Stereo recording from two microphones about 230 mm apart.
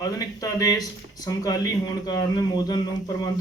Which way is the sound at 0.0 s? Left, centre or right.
Centre.